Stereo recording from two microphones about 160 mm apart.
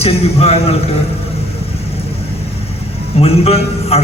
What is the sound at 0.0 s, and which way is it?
Speech, 40° left (ahead or behind).